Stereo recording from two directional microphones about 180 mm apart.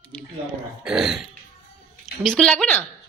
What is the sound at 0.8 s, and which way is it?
Speech, centre (ahead or behind).